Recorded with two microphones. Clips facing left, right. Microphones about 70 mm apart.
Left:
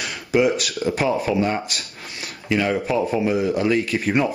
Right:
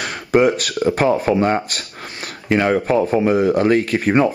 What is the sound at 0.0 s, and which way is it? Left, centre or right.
Speech, right.